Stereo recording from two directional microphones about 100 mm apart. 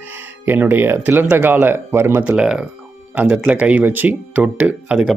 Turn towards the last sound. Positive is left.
turn(degrees=-15)  # may be behind; listen again after turning